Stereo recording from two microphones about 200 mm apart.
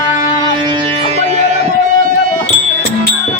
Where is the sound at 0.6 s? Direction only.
25° right (ahead or behind).